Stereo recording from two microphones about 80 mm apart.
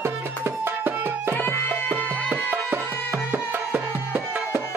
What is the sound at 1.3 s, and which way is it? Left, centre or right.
Music, left.